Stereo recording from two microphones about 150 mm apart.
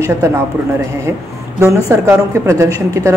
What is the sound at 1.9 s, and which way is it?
Speech, 20° right (ahead or behind).